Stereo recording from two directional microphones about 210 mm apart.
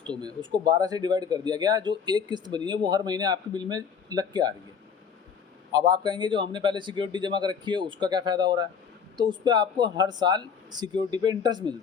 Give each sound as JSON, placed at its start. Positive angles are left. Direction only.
{"t": 0.0, "sound": "speech", "side_deg": -20}
{"t": 5.9, "sound": "speech", "side_deg": -20}